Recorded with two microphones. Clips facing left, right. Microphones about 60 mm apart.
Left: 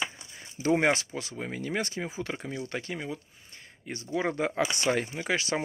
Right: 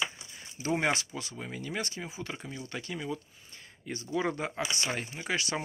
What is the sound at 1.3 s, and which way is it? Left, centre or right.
Speech, left.